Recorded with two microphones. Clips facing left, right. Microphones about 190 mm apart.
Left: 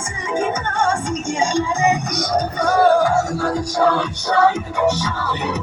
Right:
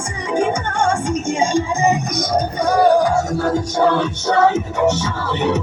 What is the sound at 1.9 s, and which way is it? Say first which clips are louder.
Music: right 1 dB; 20° right (ahead or behind).